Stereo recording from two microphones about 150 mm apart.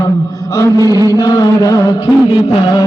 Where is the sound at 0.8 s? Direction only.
25° right (ahead or behind).